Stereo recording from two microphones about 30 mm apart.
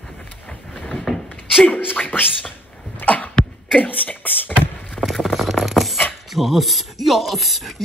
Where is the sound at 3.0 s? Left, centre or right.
Left.